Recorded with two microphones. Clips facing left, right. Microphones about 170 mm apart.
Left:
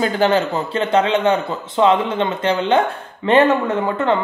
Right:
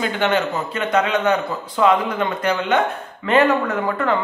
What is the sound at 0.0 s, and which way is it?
A man's voice, 35° left (ahead or behind).